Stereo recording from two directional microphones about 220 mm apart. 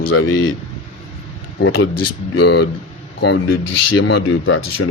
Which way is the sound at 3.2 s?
50° left (ahead or behind).